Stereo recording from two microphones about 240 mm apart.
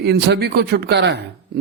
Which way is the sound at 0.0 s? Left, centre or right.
Right.